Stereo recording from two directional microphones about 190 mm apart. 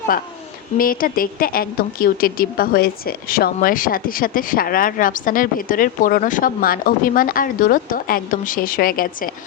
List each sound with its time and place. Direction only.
0.8 s a woman's voice: 50° left (ahead or behind)